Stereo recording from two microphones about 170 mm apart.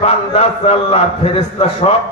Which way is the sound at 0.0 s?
35° left (ahead or behind).